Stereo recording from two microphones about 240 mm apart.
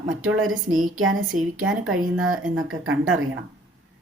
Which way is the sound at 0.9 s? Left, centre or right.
Right.